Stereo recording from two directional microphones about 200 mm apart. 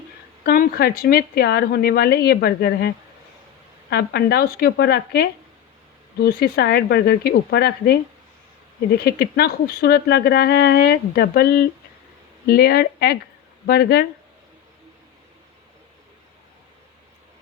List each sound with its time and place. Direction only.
0.4 s speech: 50° left (ahead or behind)
9.0 s speech: 55° left (ahead or behind)
12.5 s speech: 50° left (ahead or behind)